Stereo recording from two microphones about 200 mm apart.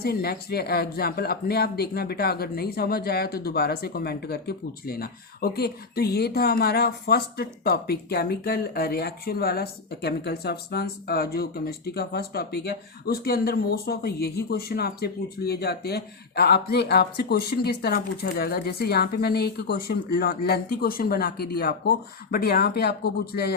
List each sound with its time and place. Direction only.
0.0 s speech: 50° left (ahead or behind)